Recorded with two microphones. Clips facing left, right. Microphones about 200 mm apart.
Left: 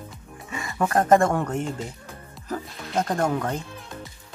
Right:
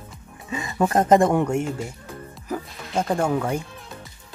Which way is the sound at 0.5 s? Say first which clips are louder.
Right 2 dB; 20° right (ahead or behind).